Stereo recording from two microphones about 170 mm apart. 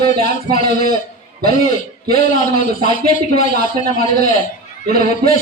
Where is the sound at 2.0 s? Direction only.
60° right (ahead or behind).